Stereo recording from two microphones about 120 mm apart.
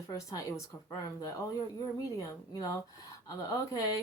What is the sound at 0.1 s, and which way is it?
Speech, 30° left (ahead or behind).